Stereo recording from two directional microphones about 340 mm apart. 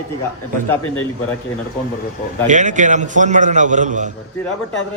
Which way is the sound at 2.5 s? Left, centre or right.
Right.